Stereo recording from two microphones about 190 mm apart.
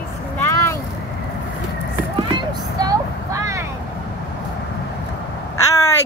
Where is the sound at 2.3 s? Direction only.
20° right (ahead or behind).